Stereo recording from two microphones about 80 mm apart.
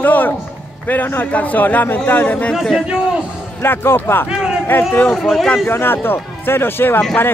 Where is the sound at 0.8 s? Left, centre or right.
Left.